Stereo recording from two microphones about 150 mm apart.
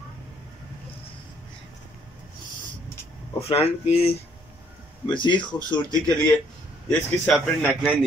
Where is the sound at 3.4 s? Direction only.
40° left (ahead or behind).